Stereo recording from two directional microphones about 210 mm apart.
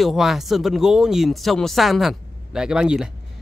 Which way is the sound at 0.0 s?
Centre (ahead or behind).